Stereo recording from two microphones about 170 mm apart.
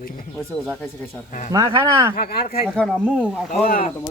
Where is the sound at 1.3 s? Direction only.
50° left (ahead or behind).